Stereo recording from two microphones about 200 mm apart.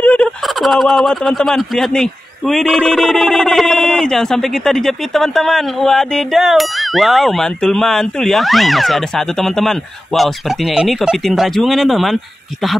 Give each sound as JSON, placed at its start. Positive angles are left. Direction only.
{"t": 0.0, "sound": "speech", "side_deg": 5}